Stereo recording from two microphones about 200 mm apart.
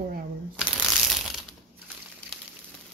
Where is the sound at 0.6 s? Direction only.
Centre (ahead or behind).